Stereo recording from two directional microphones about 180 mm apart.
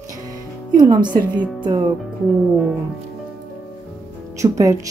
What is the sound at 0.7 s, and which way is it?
Speech, 25° right (ahead or behind).